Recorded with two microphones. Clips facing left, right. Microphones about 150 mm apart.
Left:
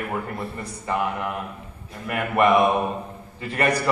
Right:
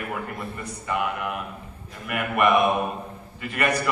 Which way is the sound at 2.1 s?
30° left (ahead or behind).